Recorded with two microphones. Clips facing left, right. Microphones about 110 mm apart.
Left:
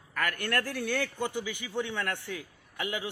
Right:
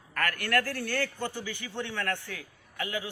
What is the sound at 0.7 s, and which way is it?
A man's voice, 15° left (ahead or behind).